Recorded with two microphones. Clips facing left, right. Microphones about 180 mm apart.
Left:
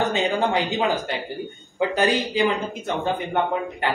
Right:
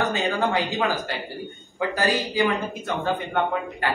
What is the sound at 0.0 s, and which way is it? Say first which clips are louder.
A man's voice: left 2 dB; 20° left (ahead or behind).